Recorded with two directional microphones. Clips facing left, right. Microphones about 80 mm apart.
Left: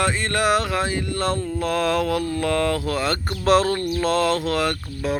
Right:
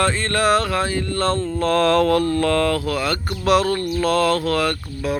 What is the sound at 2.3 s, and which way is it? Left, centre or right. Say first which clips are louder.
Speech: right 3 dB; centre.